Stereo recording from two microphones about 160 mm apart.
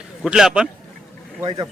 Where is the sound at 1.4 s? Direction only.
30° right (ahead or behind).